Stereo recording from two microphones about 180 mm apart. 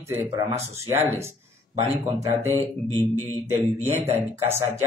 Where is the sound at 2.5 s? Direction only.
15° left (ahead or behind).